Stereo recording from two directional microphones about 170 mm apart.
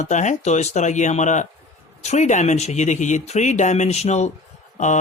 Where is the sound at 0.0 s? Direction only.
45° left (ahead or behind).